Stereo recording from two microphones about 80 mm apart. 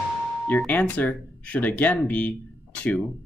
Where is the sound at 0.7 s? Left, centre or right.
Left.